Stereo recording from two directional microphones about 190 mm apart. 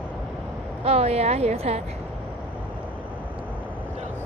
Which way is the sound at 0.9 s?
35° right (ahead or behind).